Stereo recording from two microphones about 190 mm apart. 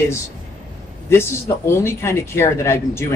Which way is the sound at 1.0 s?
15° left (ahead or behind).